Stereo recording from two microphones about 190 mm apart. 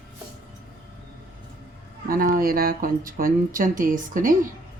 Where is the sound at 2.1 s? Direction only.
50° right (ahead or behind).